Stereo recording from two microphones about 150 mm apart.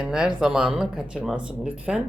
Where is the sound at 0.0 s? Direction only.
5° right (ahead or behind).